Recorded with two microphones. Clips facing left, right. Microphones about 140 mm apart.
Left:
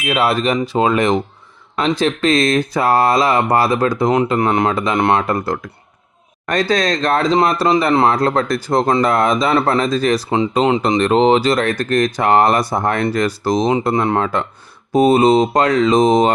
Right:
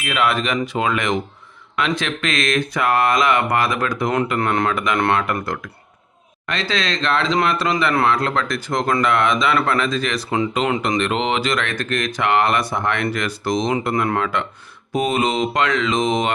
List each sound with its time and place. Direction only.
0.1 s speech: 35° left (ahead or behind)
5.2 s speech: 35° left (ahead or behind)
6.4 s speech: 45° left (ahead or behind)